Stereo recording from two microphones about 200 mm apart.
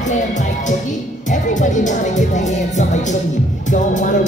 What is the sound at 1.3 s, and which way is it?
Music, 40° left (ahead or behind).